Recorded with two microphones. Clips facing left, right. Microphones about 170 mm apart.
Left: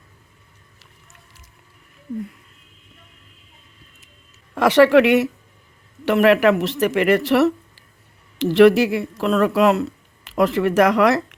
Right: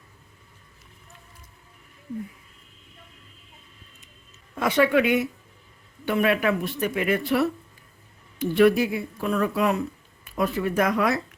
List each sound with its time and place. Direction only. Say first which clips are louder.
4.5 s speech: left 8 dB; 75° left (ahead or behind)